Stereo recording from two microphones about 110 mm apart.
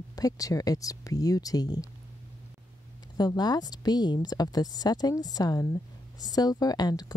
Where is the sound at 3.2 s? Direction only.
40° left (ahead or behind).